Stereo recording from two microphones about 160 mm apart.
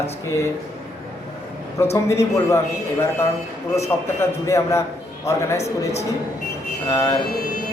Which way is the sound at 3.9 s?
15° left (ahead or behind).